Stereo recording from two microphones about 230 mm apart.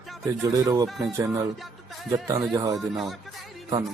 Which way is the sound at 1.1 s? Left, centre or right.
Centre.